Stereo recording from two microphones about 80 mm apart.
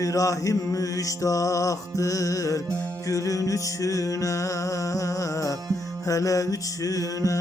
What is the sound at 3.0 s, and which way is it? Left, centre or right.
Music, left.